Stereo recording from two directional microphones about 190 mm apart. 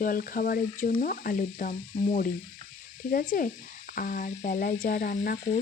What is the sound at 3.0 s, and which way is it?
Speech, 45° left (ahead or behind).